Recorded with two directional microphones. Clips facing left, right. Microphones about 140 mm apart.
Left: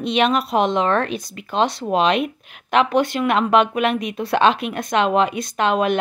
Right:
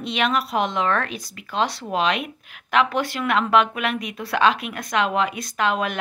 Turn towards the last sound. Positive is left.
turn(degrees=25)  # may be behind; listen again after turning